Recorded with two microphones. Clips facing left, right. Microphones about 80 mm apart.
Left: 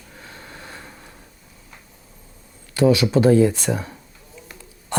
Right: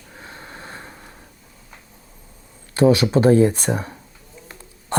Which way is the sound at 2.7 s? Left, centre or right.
Right.